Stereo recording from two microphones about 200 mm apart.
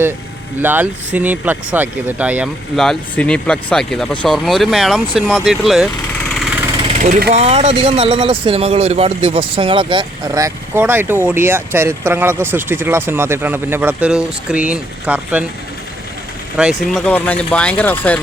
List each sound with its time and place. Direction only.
0.6 s speech: 10° right (ahead or behind)
6.8 s vehicle: 35° right (ahead or behind)
7.3 s speech: 30° right (ahead or behind); by 15.4 s 5° right (ahead or behind)
16.8 s speech: 5° left (ahead or behind)